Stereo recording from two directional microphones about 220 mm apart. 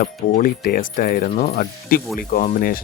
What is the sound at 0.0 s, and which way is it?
Speech, 40° left (ahead or behind).